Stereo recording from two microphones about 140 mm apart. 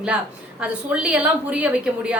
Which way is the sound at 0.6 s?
5° right (ahead or behind).